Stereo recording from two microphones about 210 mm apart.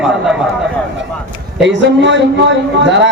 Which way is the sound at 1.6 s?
60° right (ahead or behind).